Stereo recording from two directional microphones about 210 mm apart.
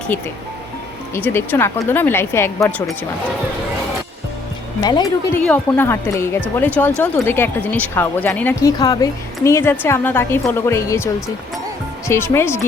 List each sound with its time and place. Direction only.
1.1 s speech: 10° left (ahead or behind)
4.8 s speech: 20° left (ahead or behind)
5.4 s speech: 10° left (ahead or behind)